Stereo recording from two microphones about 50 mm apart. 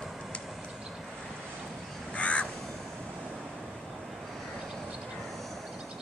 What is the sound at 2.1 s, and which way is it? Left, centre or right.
Crow, left.